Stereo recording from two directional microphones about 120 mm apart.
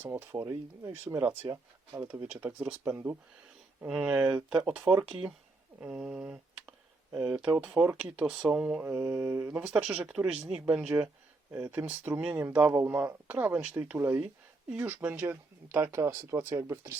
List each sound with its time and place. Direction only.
0.0 s speech: 15° right (ahead or behind)
8.8 s speech: 20° right (ahead or behind)